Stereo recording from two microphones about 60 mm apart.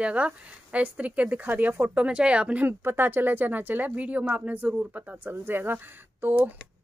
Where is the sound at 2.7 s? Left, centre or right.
Right.